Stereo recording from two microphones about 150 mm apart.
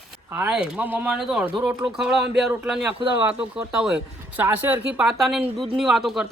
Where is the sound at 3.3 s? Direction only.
5° right (ahead or behind).